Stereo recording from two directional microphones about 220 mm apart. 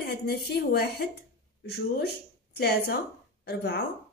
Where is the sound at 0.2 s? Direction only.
50° left (ahead or behind).